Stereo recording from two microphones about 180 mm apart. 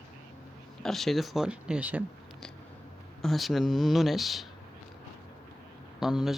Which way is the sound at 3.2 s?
Centre (ahead or behind).